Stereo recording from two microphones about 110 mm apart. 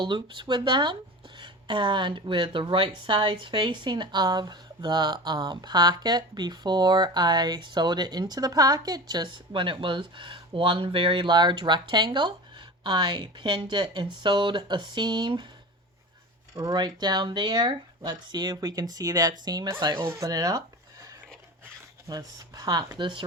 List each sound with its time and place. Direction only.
0.0 s speech: 45° right (ahead or behind)
16.6 s speech: 35° right (ahead or behind)
20.1 s a sound: 30° right (ahead or behind)
22.1 s speech: 35° right (ahead or behind)